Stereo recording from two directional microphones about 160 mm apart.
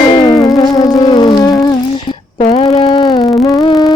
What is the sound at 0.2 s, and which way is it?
Music, 25° left (ahead or behind).